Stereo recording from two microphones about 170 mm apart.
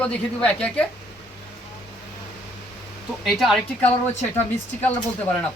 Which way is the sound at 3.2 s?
Centre (ahead or behind).